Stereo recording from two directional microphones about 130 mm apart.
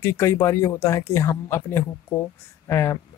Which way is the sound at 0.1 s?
20° left (ahead or behind).